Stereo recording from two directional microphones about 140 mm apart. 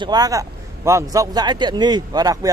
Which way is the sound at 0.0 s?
30° right (ahead or behind).